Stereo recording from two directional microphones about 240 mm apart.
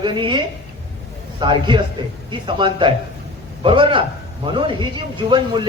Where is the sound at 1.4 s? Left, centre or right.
Centre.